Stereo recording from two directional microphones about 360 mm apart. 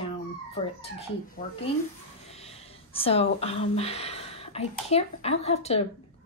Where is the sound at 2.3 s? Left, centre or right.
Centre.